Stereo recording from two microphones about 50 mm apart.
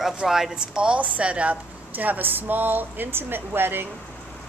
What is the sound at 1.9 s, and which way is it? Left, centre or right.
Speech, right.